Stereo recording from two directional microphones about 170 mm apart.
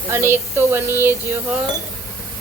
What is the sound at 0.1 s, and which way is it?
Speech, 15° right (ahead or behind).